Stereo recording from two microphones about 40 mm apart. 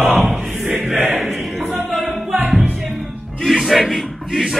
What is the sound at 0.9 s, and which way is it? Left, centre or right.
Choir, right.